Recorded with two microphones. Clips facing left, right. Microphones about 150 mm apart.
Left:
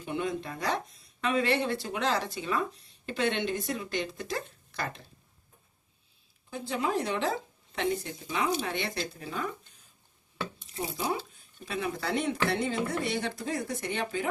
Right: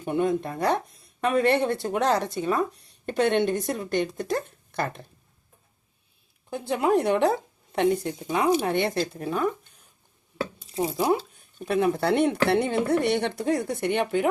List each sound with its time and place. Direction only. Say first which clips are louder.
0.0 s speech: right 8 dB; 50° right (ahead or behind)
6.5 s speech: right 8 dB; 55° right (ahead or behind)
10.9 s speech: right 8 dB; 60° right (ahead or behind)